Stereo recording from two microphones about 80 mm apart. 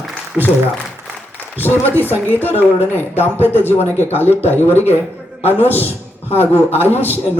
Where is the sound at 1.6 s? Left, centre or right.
Left.